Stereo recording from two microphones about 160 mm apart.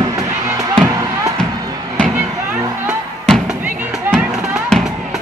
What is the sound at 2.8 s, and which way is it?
Music, 5° right (ahead or behind).